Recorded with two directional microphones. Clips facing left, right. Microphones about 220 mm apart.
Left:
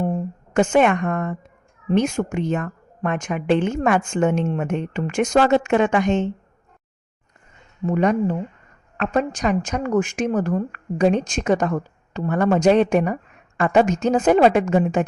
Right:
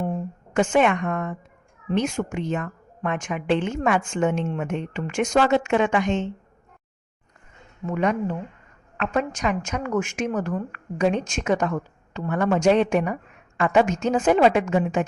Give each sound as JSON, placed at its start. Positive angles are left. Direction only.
{"t": 0.5, "sound": "a woman's voice", "side_deg": 45}
{"t": 7.9, "sound": "a woman's voice", "side_deg": 35}